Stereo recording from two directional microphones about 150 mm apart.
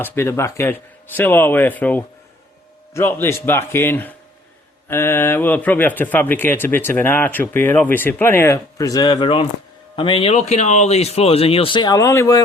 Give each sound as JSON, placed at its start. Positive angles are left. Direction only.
{"t": 0.0, "sound": "speech", "side_deg": 15}